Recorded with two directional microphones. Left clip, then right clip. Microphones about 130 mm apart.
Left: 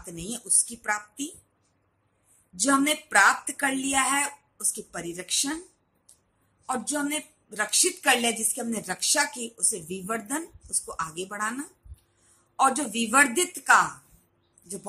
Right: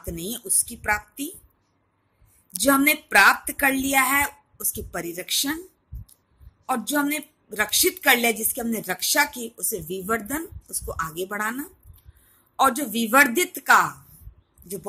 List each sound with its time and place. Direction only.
0.0 s a woman's voice: 30° right (ahead or behind)
2.6 s a woman's voice: 30° right (ahead or behind)
6.7 s a woman's voice: 25° right (ahead or behind)